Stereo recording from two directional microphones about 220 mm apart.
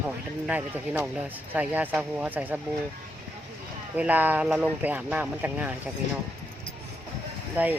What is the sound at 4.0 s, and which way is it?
Speech, 5° right (ahead or behind).